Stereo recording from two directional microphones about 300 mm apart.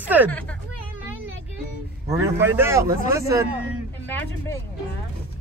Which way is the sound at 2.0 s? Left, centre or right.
Centre.